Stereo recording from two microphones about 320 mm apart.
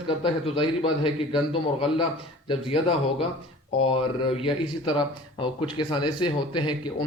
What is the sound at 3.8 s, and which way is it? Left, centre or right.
Speech, centre.